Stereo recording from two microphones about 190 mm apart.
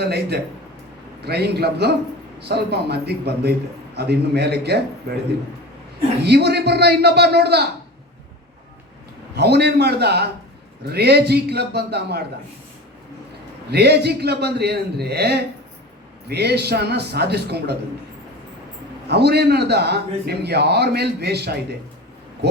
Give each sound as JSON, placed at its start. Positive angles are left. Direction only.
{"t": 0.0, "sound": "a man's voice", "side_deg": -60}
{"t": 6.2, "sound": "a man's voice", "side_deg": -60}
{"t": 9.3, "sound": "a man's voice", "side_deg": -60}
{"t": 13.7, "sound": "a man's voice", "side_deg": -60}
{"t": 19.0, "sound": "a man's voice", "side_deg": -60}